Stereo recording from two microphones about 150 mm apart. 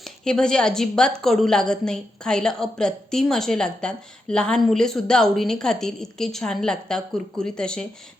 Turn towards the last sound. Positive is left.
turn(degrees=5)  # may be behind; listen again after turning